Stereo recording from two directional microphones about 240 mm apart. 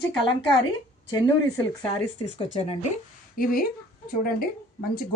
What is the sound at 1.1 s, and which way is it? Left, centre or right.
Speech, centre.